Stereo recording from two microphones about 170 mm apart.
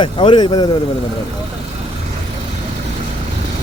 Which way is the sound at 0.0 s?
30° left (ahead or behind).